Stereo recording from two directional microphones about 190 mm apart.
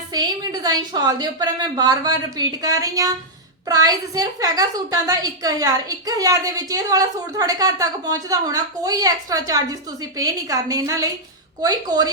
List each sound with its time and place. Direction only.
0.1 s a woman's voice: 20° right (ahead or behind)